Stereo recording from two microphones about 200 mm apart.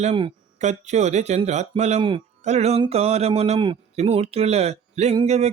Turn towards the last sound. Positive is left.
turn(degrees=-35)  # may be behind; listen again after turning